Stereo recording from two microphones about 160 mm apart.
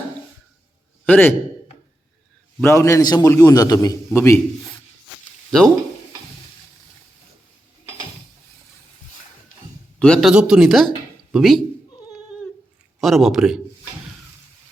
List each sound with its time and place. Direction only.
1.0 s a man's voice: 10° left (ahead or behind)
2.6 s a man's voice: 15° left (ahead or behind)
5.5 s speech: 5° left (ahead or behind)
10.0 s speech: 5° left (ahead or behind)
13.0 s speech: centre (ahead or behind)